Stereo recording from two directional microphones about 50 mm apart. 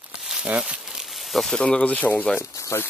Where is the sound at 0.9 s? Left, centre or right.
Centre.